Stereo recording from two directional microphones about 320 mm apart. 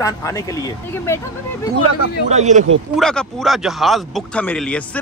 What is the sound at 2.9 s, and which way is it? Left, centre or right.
Speech, centre.